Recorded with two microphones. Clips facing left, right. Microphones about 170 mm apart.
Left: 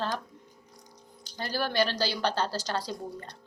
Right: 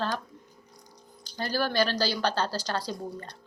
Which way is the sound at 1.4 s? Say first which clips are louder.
Right 1 dB; 20° left (ahead or behind).